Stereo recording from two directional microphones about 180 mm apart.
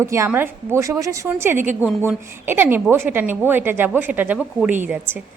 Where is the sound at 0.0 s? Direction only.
15° right (ahead or behind).